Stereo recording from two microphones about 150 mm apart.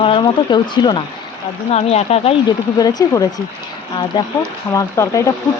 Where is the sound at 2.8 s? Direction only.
25° left (ahead or behind).